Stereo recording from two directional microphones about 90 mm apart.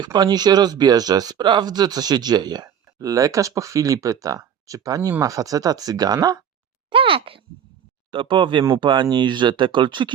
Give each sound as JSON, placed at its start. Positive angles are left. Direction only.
{"t": 0.0, "sound": "speech", "side_deg": -50}
{"t": 6.9, "sound": "a child's voice", "side_deg": -80}
{"t": 8.1, "sound": "speech", "side_deg": -70}